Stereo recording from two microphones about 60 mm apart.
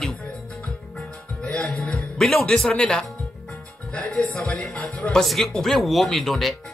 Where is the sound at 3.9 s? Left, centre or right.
Centre.